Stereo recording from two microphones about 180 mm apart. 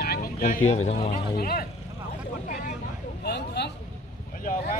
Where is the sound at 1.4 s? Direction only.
55° left (ahead or behind).